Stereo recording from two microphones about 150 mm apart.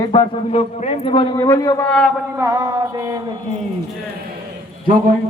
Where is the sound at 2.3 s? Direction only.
25° right (ahead or behind).